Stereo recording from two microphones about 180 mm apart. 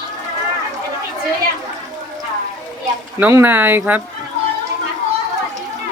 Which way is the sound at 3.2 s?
10° right (ahead or behind).